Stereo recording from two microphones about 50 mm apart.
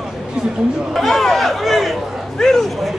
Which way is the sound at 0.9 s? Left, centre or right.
Centre.